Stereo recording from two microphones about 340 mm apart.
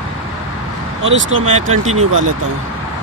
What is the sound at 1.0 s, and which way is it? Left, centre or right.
Speech, right.